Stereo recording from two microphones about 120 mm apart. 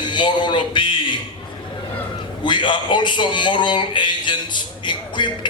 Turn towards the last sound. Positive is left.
turn(degrees=40)  # may be behind; listen again after turning